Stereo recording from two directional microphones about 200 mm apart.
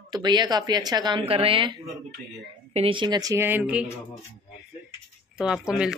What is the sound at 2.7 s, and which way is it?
Speech, 25° right (ahead or behind).